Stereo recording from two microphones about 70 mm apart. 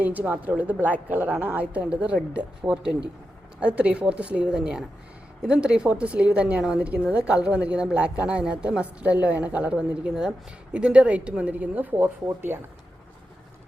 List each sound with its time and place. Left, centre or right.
0.0 s a woman's voice: right
12.5 s speech: right